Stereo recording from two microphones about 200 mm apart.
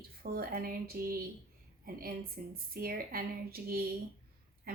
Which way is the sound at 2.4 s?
45° right (ahead or behind).